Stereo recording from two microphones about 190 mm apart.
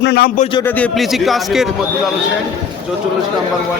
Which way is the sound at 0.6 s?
10° left (ahead or behind).